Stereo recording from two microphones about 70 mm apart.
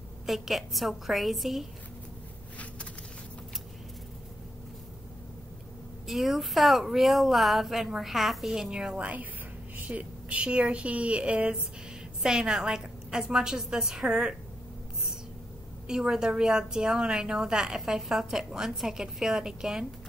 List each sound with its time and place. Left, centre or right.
0.3 s a woman's voice: centre
6.0 s a woman's voice: centre
15.9 s a woman's voice: centre